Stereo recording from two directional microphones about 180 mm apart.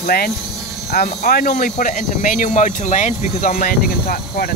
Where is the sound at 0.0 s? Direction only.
55° left (ahead or behind).